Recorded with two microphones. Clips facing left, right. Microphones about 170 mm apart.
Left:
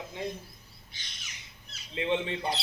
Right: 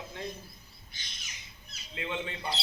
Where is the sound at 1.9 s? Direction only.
25° left (ahead or behind).